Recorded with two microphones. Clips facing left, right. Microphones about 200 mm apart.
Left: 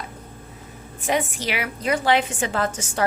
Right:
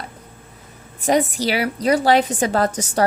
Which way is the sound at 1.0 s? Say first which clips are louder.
Right 6 dB; 40° right (ahead or behind).